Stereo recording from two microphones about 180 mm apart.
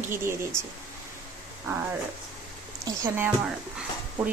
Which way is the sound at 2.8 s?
20° right (ahead or behind).